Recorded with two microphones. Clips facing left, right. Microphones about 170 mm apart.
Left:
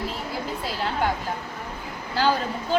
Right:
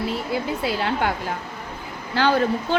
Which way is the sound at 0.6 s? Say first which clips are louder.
Even; 80° right.